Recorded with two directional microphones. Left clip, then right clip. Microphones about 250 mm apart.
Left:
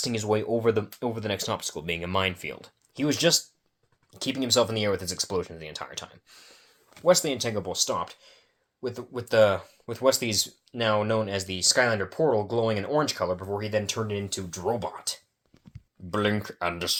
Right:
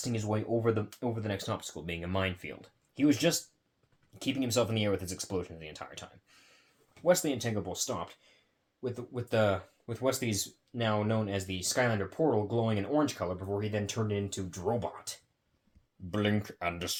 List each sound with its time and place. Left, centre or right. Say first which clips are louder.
0.0 s speech: left 8 dB; left